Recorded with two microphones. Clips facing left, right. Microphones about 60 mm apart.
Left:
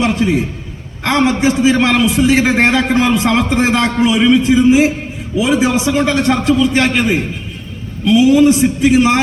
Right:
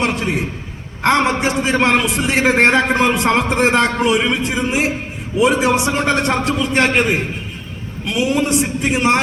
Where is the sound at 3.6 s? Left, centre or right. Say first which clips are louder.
Left 1 dB; right.